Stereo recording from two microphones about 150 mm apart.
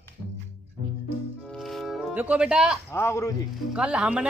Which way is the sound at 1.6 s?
Centre (ahead or behind).